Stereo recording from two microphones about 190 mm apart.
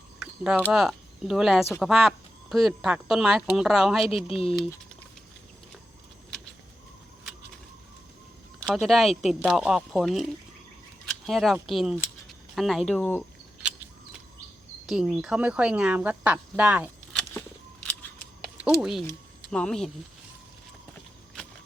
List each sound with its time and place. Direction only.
0.7 s speech: centre (ahead or behind)
4.3 s speech: 30° left (ahead or behind)
8.6 s speech: centre (ahead or behind)
14.8 s speech: 5° right (ahead or behind)
17.1 s a sound: 5° left (ahead or behind)
18.8 s speech: centre (ahead or behind)